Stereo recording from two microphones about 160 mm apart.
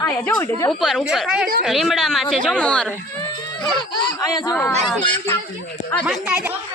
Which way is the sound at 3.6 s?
25° left (ahead or behind).